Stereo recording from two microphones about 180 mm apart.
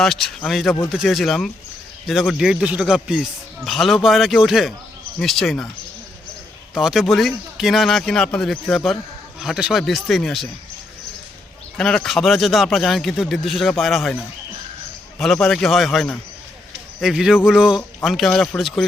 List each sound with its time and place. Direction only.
0.0 s speech: centre (ahead or behind)
6.7 s speech: centre (ahead or behind)
11.8 s speech: centre (ahead or behind)
15.2 s speech: centre (ahead or behind)